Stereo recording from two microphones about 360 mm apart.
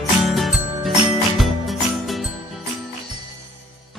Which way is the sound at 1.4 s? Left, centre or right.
Centre.